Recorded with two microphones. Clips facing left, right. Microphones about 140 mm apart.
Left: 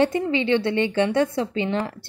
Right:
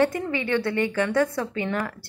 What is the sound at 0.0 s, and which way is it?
A woman's voice, 25° left (ahead or behind).